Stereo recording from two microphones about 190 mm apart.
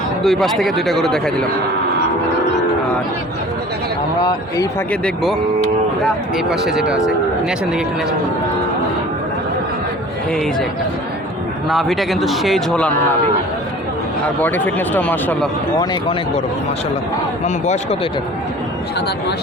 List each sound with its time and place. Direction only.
0.2 s speech: centre (ahead or behind)
4.2 s speech: 20° left (ahead or behind)
4.9 s speech: 5° left (ahead or behind)
6.5 s speech: centre (ahead or behind)
11.7 s speech: centre (ahead or behind)
14.4 s speech: 10° left (ahead or behind)
15.8 s speech: 25° left (ahead or behind)